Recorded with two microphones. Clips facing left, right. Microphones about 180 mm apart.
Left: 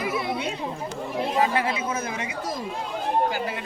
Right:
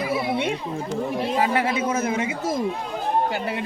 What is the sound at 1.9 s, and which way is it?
Speech, 25° right (ahead or behind).